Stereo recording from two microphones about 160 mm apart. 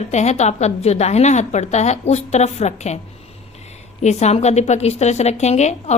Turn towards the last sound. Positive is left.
turn(degrees=45)  # may be behind; listen again after turning